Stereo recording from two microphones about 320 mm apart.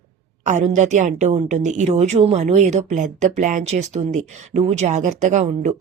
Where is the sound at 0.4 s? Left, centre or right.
Right.